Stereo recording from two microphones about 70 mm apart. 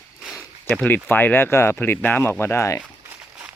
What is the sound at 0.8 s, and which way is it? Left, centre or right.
Speech, left.